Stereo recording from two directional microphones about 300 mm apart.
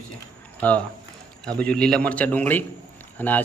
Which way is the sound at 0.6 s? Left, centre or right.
Centre.